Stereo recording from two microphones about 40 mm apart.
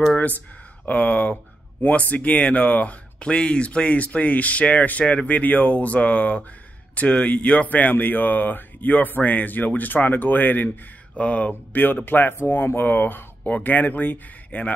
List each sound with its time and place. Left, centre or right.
0.8 s speech: left
1.8 s speech: left
3.3 s speech: left
7.9 s speech: left
11.1 s speech: left
11.8 s speech: left
13.4 s speech: left